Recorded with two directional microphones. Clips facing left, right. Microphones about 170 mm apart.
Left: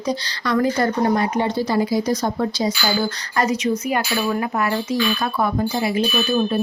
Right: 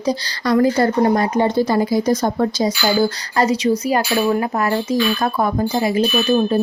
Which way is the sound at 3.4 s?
30° right (ahead or behind).